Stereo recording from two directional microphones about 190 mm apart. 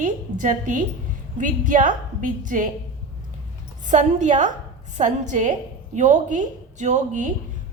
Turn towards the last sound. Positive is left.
turn(degrees=-40)  # may be behind; listen again after turning